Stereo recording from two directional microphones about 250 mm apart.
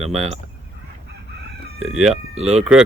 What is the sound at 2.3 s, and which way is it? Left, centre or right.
Speech, right.